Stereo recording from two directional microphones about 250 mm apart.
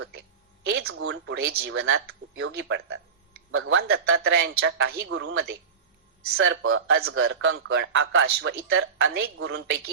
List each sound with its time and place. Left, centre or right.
0.7 s speech: right